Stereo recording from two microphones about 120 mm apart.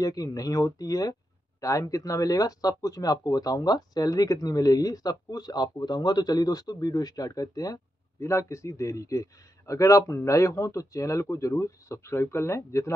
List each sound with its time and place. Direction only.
0.0 s speech: 30° left (ahead or behind)